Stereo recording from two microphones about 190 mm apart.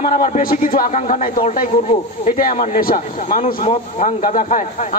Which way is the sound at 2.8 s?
50° left (ahead or behind).